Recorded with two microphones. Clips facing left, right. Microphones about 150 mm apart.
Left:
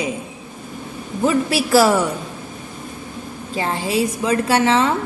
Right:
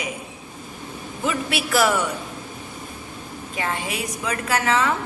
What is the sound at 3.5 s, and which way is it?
A woman's voice, 30° left (ahead or behind).